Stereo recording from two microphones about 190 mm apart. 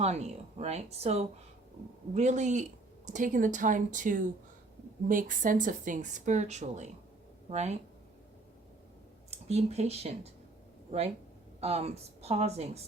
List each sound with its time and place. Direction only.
0.0 s speech: 35° right (ahead or behind)
9.3 s speech: 35° right (ahead or behind)
11.6 s speech: 35° right (ahead or behind)